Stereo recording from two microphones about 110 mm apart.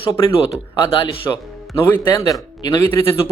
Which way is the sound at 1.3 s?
20° left (ahead or behind).